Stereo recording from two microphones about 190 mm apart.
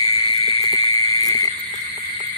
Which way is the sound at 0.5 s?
30° right (ahead or behind).